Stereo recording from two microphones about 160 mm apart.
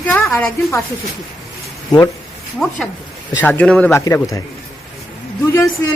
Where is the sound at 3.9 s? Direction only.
20° left (ahead or behind).